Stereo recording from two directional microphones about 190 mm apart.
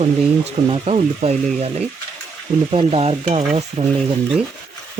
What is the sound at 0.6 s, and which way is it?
Frying, 30° right (ahead or behind).